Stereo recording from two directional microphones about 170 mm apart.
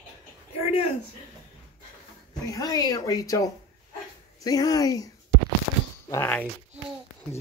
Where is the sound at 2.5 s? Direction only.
20° left (ahead or behind).